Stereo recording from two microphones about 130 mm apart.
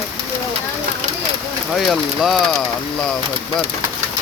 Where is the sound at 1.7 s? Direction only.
Centre (ahead or behind).